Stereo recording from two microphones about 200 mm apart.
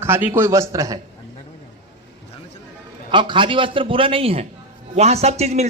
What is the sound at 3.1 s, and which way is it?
A man's voice, 25° right (ahead or behind).